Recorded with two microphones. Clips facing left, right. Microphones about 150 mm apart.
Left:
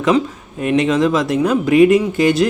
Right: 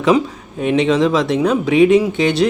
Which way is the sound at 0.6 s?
Centre (ahead or behind).